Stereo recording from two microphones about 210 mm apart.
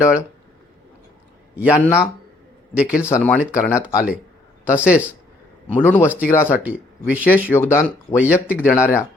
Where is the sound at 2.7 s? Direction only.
5° right (ahead or behind).